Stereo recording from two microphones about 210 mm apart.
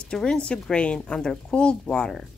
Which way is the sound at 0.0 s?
5° left (ahead or behind).